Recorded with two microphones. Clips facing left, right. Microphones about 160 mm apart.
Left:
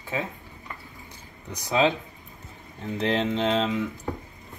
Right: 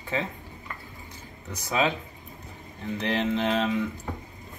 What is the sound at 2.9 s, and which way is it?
Mantra, 30° left (ahead or behind).